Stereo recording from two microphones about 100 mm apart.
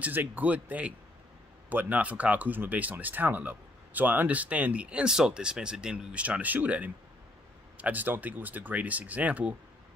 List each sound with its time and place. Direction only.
0.0 s speech: 20° right (ahead or behind)